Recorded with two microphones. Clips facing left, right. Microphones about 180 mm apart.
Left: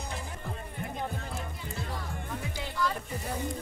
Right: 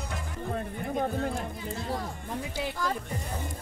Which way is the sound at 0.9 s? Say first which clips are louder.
Right 9 dB; 55° right (ahead or behind).